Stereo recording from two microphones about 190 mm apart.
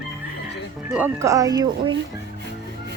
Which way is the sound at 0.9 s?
10° right (ahead or behind).